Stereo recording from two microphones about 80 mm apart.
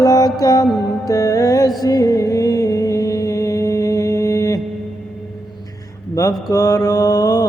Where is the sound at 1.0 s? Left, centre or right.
Left.